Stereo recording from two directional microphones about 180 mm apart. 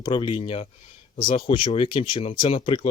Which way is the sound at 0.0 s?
25° left (ahead or behind).